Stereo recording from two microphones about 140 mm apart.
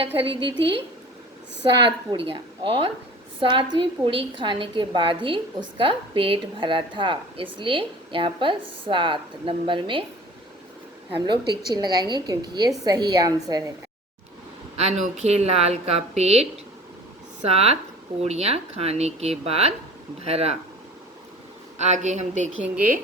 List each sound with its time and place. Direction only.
0.0 s a woman's voice: 40° right (ahead or behind)
1.6 s a woman's voice: 35° right (ahead or behind)
11.3 s a woman's voice: 30° right (ahead or behind)
14.8 s a woman's voice: 55° right (ahead or behind)
21.8 s a woman's voice: 60° right (ahead or behind)